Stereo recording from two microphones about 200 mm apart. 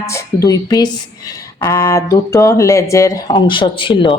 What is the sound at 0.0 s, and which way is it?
A woman's voice, 15° left (ahead or behind).